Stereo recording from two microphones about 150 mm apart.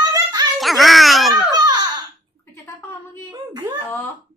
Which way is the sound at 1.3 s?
25° right (ahead or behind).